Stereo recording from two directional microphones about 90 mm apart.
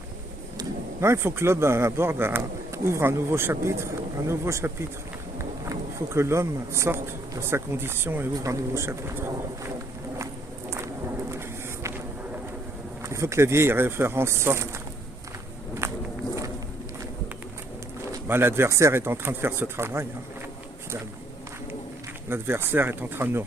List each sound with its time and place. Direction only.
1.0 s a man's voice: 30° right (ahead or behind)
8.4 s speech: 35° right (ahead or behind)
11.3 s a sound: 30° right (ahead or behind)
13.0 s speech: 30° right (ahead or behind)
15.8 s walk: 25° right (ahead or behind)
18.3 s speech: 25° right (ahead or behind)
22.3 s speech: 25° right (ahead or behind)